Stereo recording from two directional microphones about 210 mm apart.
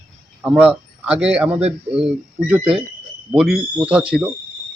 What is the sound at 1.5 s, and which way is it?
Speech, 30° right (ahead or behind).